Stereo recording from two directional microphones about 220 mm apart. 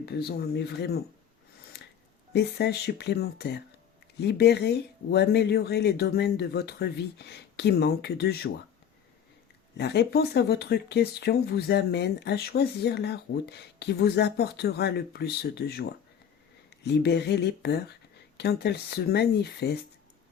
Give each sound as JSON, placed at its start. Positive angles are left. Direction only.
{"t": 0.0, "sound": "speech", "side_deg": 45}
{"t": 2.3, "sound": "speech", "side_deg": 50}
{"t": 9.7, "sound": "speech", "side_deg": 50}